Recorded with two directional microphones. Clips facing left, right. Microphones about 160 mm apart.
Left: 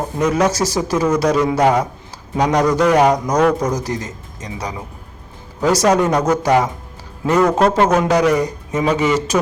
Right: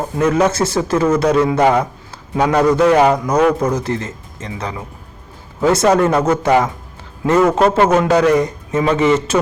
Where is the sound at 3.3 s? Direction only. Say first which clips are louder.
Right 2 dB; 5° right (ahead or behind).